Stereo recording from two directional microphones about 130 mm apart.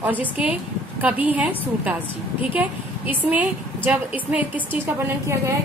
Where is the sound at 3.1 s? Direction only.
15° right (ahead or behind).